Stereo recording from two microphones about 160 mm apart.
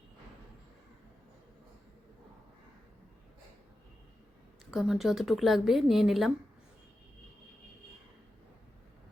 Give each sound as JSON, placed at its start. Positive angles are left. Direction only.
{"t": 4.7, "sound": "a woman's voice", "side_deg": 0}